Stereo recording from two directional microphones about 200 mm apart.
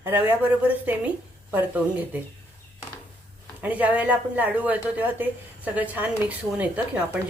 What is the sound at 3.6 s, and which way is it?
A woman's voice, 10° right (ahead or behind).